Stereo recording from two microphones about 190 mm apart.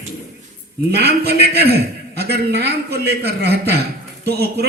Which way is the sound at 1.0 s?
60° right (ahead or behind).